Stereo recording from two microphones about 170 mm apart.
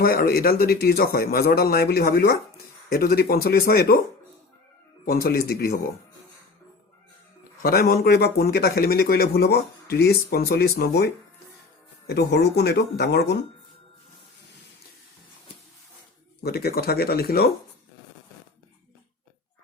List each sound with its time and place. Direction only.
0.0 s a man's voice: 60° left (ahead or behind)
5.0 s a man's voice: 60° left (ahead or behind)
7.6 s speech: 60° left (ahead or behind); by 13.4 s 75° left (ahead or behind)
16.4 s a man's voice: 70° left (ahead or behind)